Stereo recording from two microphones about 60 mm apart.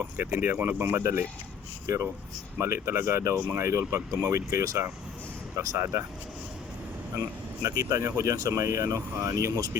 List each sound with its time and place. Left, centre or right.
0.0 s speech: right
2.6 s speech: right
5.5 s speech: right
7.2 s speech: right